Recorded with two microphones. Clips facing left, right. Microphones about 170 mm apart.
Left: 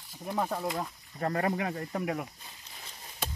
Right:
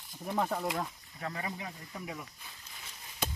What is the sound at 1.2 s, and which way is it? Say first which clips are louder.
Speech: left 10 dB; 55° left (ahead or behind).